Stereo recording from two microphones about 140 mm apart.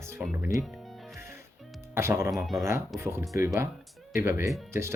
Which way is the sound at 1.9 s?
20° right (ahead or behind).